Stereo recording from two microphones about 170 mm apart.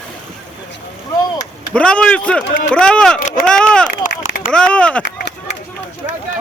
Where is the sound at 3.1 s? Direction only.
55° left (ahead or behind).